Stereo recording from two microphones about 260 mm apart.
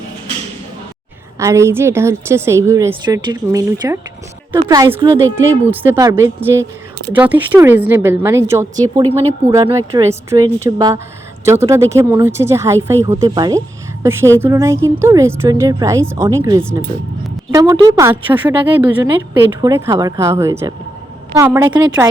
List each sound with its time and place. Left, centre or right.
1.4 s a woman's voice: centre
17.5 s a woman's voice: centre